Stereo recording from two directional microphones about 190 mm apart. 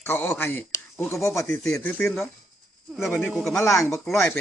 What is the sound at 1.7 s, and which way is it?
Speech, 10° left (ahead or behind).